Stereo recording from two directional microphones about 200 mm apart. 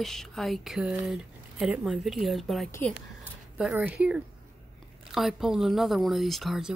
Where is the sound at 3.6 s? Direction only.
5° right (ahead or behind).